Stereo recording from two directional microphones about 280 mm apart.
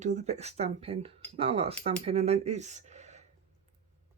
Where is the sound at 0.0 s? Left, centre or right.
Right.